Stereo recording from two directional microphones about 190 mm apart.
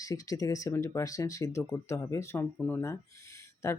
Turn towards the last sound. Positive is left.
turn(degrees=15)  # may be behind; listen again after turning